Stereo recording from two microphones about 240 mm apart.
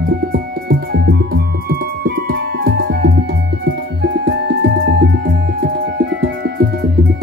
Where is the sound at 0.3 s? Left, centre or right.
Right.